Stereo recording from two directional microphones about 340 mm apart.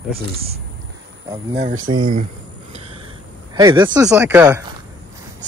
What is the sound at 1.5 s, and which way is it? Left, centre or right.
Speech, right.